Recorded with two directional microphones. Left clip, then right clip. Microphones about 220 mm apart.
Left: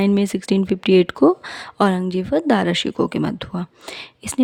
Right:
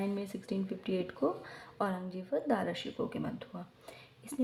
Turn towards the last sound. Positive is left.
turn(degrees=50)  # may be behind; listen again after turning